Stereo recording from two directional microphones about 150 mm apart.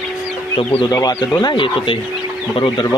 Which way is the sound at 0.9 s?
25° left (ahead or behind).